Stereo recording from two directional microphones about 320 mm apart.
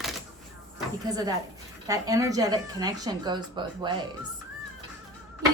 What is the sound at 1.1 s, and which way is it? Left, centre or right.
Speech, centre.